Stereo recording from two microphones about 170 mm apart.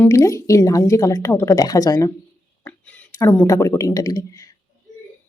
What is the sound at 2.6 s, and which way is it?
Speech, 10° left (ahead or behind).